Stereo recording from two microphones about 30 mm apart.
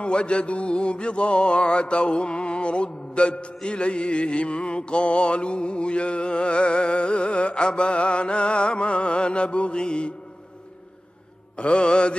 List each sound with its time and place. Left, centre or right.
0.0 s mantra: left
11.5 s mantra: left